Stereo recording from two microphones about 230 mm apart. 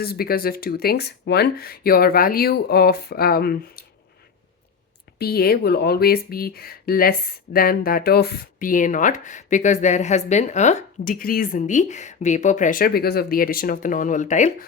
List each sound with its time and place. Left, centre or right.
0.0 s speech: left
5.2 s speech: left